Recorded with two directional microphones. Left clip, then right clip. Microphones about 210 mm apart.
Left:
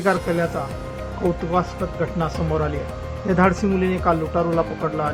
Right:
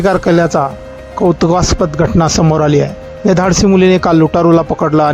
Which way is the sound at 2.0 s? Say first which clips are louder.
Right 12 dB; 50° right (ahead or behind).